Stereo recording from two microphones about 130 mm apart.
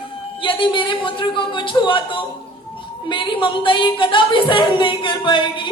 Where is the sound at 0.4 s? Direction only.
40° left (ahead or behind).